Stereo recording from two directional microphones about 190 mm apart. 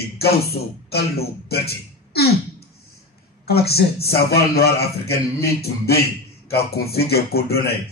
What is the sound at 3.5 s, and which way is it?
Speech, 55° left (ahead or behind).